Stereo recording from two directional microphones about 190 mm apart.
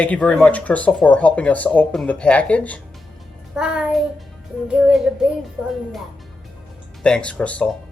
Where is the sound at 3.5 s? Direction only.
5° right (ahead or behind).